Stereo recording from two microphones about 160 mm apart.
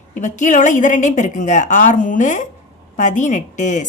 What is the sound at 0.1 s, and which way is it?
A woman's voice, 50° left (ahead or behind).